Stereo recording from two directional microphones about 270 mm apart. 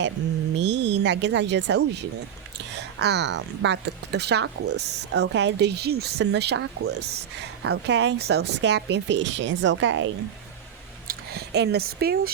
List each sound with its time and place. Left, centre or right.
0.6 s a woman's voice: right
11.1 s speech: right